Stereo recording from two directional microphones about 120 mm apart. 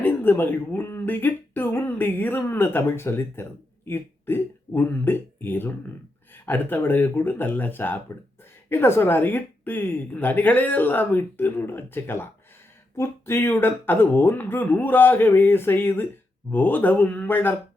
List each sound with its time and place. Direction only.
0.0 s a woman's voice: 15° left (ahead or behind)